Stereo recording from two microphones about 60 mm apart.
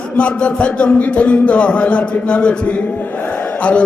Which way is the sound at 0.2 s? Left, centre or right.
Centre.